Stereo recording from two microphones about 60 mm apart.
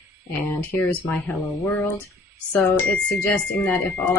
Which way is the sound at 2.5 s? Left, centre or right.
Left.